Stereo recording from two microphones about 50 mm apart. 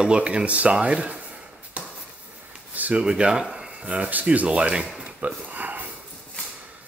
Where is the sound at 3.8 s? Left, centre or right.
Right.